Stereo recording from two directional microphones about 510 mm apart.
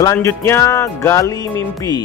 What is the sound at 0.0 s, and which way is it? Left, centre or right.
Speech, centre.